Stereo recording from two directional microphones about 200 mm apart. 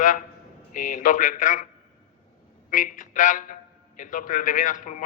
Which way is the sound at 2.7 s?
40° left (ahead or behind).